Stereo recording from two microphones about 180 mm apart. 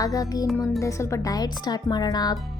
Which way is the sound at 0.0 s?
20° left (ahead or behind).